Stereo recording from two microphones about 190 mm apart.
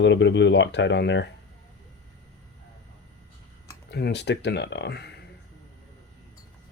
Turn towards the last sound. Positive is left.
turn(degrees=60)  # may be behind; listen again after turning